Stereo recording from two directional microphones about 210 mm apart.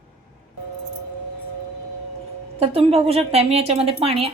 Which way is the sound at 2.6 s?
30° right (ahead or behind).